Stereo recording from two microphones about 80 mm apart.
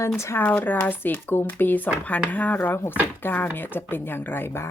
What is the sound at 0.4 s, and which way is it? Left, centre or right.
Speech, left.